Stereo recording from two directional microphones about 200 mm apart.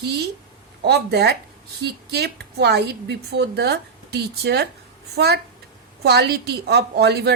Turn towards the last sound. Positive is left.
turn(degrees=-55)  # may be behind; listen again after turning